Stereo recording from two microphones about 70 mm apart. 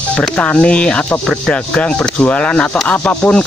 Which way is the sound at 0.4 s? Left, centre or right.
Centre.